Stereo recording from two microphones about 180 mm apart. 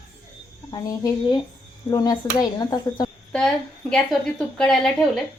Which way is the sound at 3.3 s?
5° left (ahead or behind).